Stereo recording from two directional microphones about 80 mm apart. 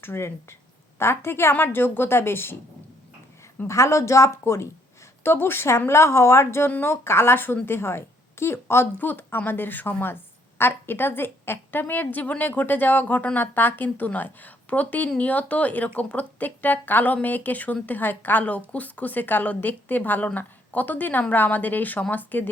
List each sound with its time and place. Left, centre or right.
0.0 s a woman's voice: left
3.7 s a woman's voice: left